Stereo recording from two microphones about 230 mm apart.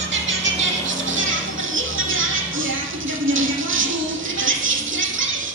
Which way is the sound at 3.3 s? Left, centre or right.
Right.